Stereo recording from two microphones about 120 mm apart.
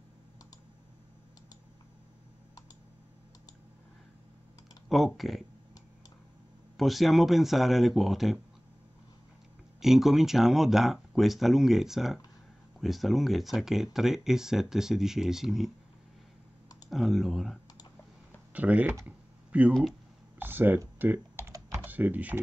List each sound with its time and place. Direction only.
4.8 s speech: centre (ahead or behind)
6.8 s speech: centre (ahead or behind)
9.8 s speech: centre (ahead or behind)
16.9 s speech: centre (ahead or behind)
18.5 s speech: 15° right (ahead or behind)
19.0 s a sound: 10° right (ahead or behind)
19.7 s speech: centre (ahead or behind)
20.3 s a sound: 15° right (ahead or behind)
21.5 s typing: 25° right (ahead or behind)
21.8 s speech: 15° right (ahead or behind)